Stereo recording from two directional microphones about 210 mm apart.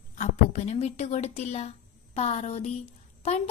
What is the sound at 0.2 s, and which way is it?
A woman's voice, 30° left (ahead or behind).